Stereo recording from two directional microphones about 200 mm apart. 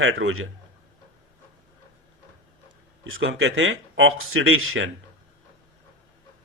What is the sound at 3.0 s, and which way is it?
Speech, 75° right (ahead or behind).